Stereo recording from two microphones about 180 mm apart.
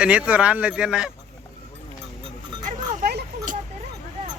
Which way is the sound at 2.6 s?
50° right (ahead or behind).